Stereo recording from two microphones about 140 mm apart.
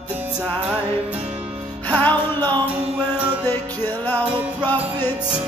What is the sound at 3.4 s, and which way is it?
Music, 15° left (ahead or behind).